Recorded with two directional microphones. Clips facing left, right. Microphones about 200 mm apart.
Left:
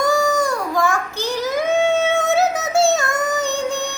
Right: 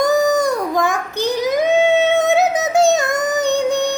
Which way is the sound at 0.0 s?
20° right (ahead or behind).